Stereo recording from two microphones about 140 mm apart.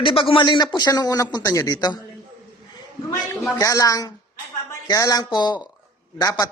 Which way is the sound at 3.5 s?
25° left (ahead or behind).